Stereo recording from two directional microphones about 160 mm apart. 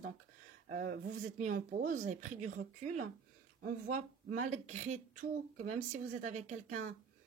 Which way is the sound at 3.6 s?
55° right (ahead or behind).